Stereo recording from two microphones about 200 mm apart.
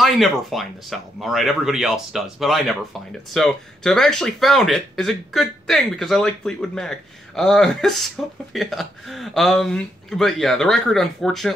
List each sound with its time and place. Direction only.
0.0 s speech: centre (ahead or behind)